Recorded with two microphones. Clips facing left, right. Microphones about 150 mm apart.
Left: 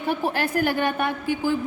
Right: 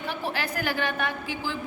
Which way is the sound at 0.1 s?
50° left (ahead or behind).